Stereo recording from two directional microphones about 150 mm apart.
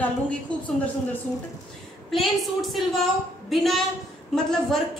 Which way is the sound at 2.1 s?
Centre (ahead or behind).